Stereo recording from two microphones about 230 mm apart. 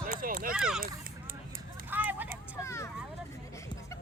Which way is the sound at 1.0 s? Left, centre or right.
Right.